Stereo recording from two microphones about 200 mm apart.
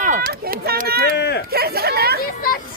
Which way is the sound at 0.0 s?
40° right (ahead or behind).